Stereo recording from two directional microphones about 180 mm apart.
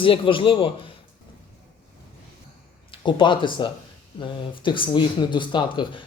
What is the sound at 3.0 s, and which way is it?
Speech, 25° left (ahead or behind).